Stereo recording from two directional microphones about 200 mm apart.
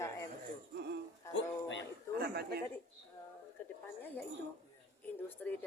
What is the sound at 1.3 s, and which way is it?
Music, 65° left (ahead or behind).